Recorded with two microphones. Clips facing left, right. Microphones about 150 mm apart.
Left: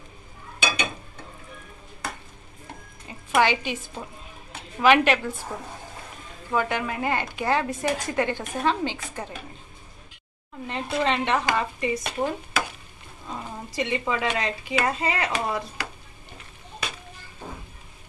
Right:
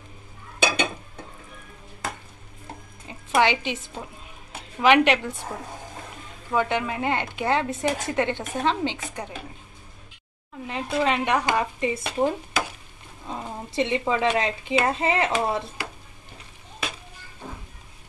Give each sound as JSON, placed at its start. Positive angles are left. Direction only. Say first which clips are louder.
{"t": 3.1, "sound": "a woman's voice", "louder": "even", "side_deg": -20}
{"t": 6.5, "sound": "speech", "louder": "right 1 dB", "side_deg": -20}
{"t": 10.7, "sound": "speech", "louder": "right 1 dB", "side_deg": -5}